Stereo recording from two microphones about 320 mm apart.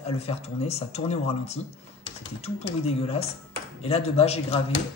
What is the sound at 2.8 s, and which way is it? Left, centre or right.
Speech, centre.